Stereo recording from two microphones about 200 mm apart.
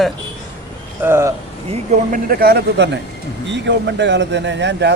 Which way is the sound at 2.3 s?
50° right (ahead or behind).